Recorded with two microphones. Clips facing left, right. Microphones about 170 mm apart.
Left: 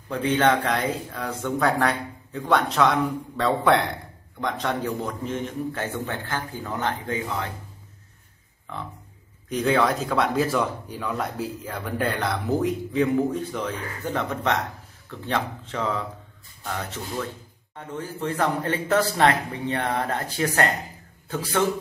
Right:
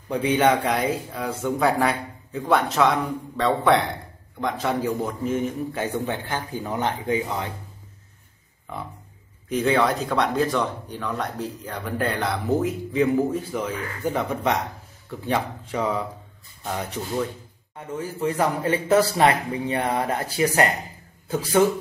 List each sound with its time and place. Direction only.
0.1 s speech: 15° right (ahead or behind)
9.5 s speech: centre (ahead or behind)